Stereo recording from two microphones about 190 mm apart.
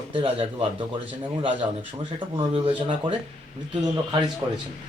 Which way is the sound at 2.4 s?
25° right (ahead or behind).